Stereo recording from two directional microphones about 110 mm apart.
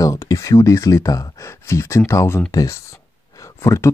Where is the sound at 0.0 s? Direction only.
30° left (ahead or behind).